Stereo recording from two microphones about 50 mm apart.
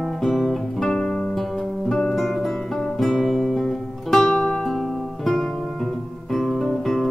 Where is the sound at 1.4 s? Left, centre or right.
Centre.